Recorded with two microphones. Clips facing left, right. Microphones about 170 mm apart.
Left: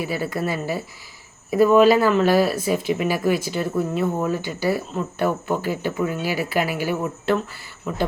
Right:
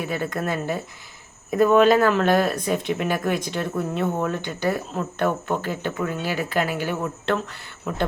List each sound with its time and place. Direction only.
0.0 s speech: 5° left (ahead or behind)